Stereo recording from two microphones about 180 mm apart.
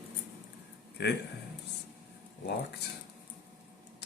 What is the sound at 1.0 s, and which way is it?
Speech, 70° left (ahead or behind).